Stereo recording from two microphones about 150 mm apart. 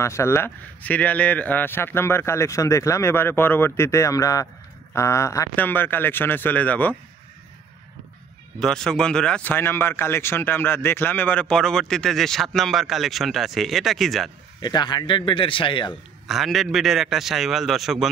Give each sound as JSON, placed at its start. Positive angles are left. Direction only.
{"t": 0.0, "sound": "a man's voice", "side_deg": 20}
{"t": 8.5, "sound": "speech", "side_deg": 5}
{"t": 14.6, "sound": "a man's voice", "side_deg": 30}
{"t": 16.3, "sound": "speech", "side_deg": 0}